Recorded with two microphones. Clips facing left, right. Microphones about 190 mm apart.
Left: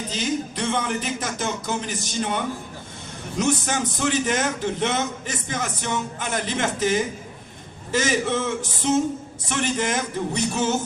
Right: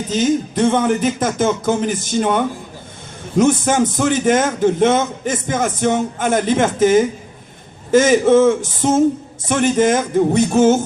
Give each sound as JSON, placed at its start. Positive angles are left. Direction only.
{"t": 0.1, "sound": "a man's voice", "side_deg": -50}